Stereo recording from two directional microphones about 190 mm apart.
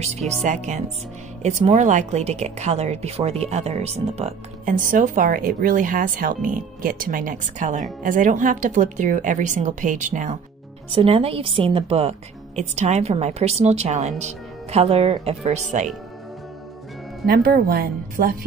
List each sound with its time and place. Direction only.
0.0 s speech: 35° right (ahead or behind)
10.9 s speech: 30° right (ahead or behind)
17.3 s a woman's voice: 50° right (ahead or behind)